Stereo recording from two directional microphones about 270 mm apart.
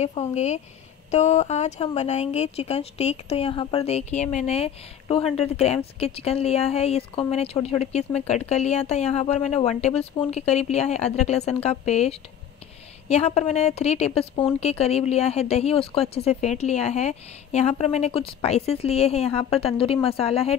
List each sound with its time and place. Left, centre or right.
0.0 s speech: left